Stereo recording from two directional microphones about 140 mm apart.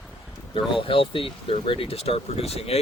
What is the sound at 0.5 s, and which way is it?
Speech, 40° left (ahead or behind).